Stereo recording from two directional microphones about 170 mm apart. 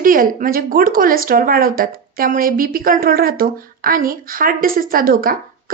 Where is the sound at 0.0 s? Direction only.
55° right (ahead or behind).